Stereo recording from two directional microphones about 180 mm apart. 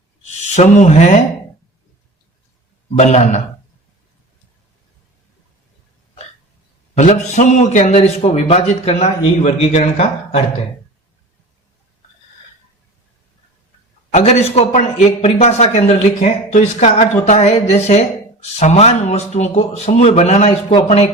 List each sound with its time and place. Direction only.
0.5 s a man's voice: 40° left (ahead or behind)
3.0 s a man's voice: 40° left (ahead or behind)
6.9 s a man's voice: 45° left (ahead or behind)
14.1 s a man's voice: 40° left (ahead or behind)